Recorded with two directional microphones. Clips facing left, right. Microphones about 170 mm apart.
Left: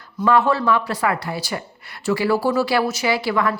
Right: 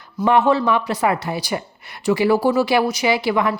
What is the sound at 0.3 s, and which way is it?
A woman's voice, 20° right (ahead or behind).